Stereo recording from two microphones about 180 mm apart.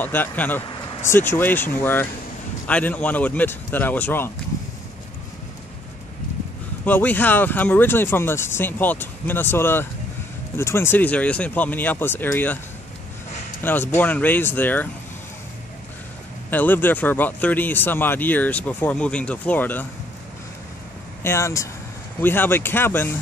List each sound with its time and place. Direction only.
0.0 s speech: 10° left (ahead or behind)
0.7 s a sound: 25° left (ahead or behind)
1.1 s speech: 15° left (ahead or behind)
6.8 s speech: 10° left (ahead or behind)
13.6 s speech: 10° left (ahead or behind)
16.4 s speech: 10° left (ahead or behind)
21.2 s speech: 15° left (ahead or behind)